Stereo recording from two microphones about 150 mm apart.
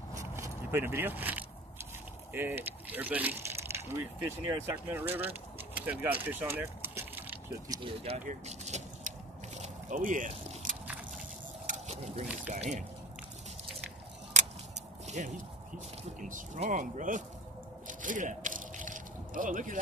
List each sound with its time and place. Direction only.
0.1 s scrape: 20° right (ahead or behind)
2.3 s speech: 15° right (ahead or behind)
6.2 s keys jangling: 15° right (ahead or behind)
7.6 s speech: 25° right (ahead or behind)
8.3 s vehicle: 50° right (ahead or behind)
9.6 s a sound: 60° right (ahead or behind)
10.2 s keys jangling: 60° right (ahead or behind)
11.6 s a sound: 45° right (ahead or behind)
12.4 s speech: 50° right (ahead or behind)
14.3 s a sound: 50° right (ahead or behind)
15.0 s speech: 50° right (ahead or behind)
17.8 s a sound: 60° right (ahead or behind)